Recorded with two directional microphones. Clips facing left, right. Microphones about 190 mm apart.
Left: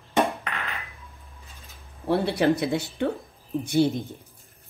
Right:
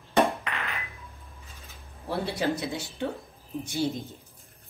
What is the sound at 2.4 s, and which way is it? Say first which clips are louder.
Speech: left 7 dB; 60° left (ahead or behind).